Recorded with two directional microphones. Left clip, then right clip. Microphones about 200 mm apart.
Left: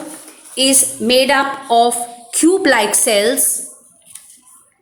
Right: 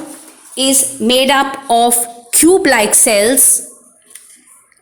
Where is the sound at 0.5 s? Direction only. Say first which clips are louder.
Even; 15° right (ahead or behind).